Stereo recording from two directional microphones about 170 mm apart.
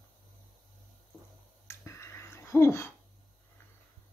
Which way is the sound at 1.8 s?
15° left (ahead or behind).